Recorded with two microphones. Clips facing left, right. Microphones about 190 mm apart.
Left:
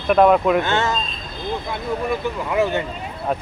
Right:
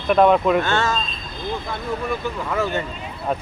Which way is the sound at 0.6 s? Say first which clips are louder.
Left 1 dB; 15° left (ahead or behind).